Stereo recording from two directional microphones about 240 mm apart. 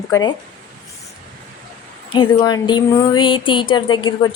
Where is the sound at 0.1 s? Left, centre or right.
Centre.